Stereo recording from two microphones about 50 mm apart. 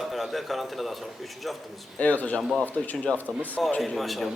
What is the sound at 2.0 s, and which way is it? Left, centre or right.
Speech, left.